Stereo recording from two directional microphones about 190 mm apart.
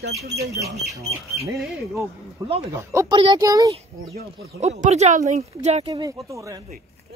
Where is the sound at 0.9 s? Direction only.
15° right (ahead or behind).